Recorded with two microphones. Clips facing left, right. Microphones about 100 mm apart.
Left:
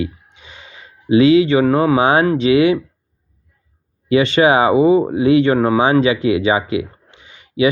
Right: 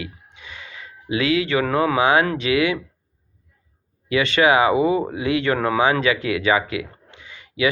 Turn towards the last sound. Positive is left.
turn(degrees=25)  # may be behind; listen again after turning